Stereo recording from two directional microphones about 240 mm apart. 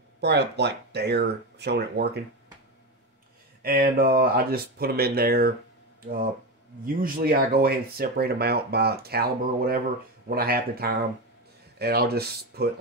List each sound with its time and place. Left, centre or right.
0.2 s speech: right
3.6 s speech: right
7.0 s speech: right